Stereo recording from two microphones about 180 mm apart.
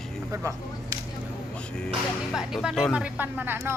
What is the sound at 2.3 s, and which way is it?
Speech, 5° right (ahead or behind).